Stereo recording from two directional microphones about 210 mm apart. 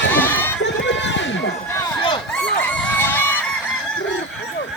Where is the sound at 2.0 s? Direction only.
25° left (ahead or behind).